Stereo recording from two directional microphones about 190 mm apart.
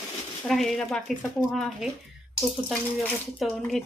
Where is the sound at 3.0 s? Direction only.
5° left (ahead or behind).